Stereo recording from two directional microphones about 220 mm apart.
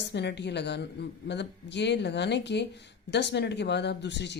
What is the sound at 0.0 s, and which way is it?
Speech, 50° left (ahead or behind).